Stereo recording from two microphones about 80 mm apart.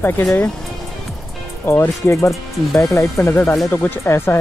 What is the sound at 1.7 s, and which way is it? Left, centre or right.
Speech, left.